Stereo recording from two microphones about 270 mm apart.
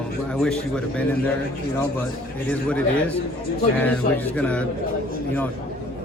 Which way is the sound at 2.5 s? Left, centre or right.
Centre.